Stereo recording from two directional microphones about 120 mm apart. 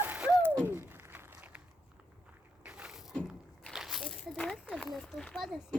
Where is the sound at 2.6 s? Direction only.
10° right (ahead or behind).